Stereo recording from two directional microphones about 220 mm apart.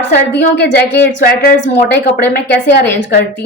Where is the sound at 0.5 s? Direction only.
50° left (ahead or behind).